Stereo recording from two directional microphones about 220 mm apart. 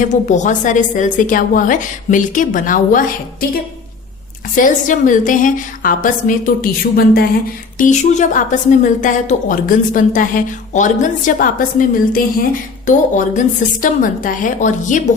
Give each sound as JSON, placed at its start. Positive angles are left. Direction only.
{"t": 0.0, "sound": "a woman's voice", "side_deg": 35}